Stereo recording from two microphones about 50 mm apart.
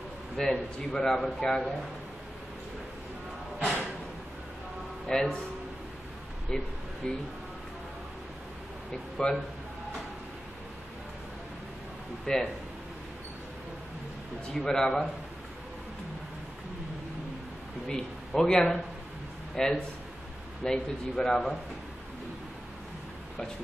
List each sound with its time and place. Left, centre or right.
0.4 s a man's voice: centre
5.0 s speech: centre
6.5 s a man's voice: centre
8.9 s a man's voice: centre
12.3 s a man's voice: centre
14.5 s a man's voice: centre
17.8 s a man's voice: centre